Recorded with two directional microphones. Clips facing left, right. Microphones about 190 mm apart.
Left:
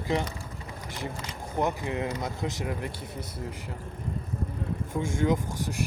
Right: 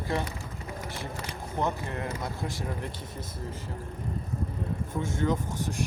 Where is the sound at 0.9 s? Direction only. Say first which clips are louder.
Left 1 dB; 15° left (ahead or behind).